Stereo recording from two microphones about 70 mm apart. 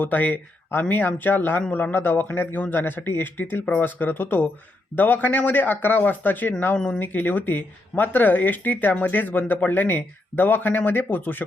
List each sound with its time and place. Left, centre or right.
0.0 s speech: left
7.0 s speech: left